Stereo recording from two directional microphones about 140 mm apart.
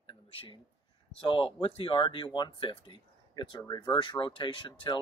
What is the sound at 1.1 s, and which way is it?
Speech, 40° left (ahead or behind).